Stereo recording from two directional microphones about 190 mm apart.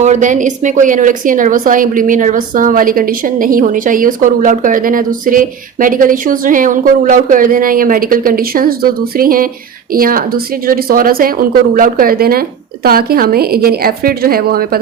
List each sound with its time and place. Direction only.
0.0 s a woman's voice: 40° right (ahead or behind)